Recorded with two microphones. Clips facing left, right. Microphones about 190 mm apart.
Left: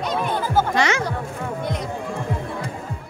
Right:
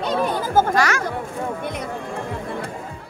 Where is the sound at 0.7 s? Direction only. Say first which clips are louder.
Even; 20° left (ahead or behind).